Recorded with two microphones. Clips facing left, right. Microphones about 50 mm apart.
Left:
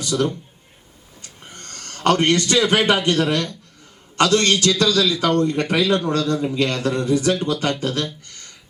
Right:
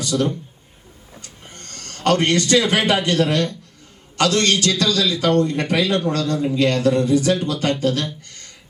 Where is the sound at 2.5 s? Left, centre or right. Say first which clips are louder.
Right 1 dB; left.